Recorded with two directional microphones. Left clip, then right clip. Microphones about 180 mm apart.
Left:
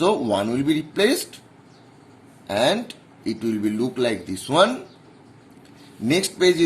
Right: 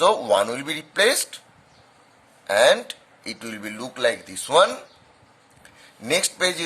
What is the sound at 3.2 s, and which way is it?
Speech, 40° right (ahead or behind).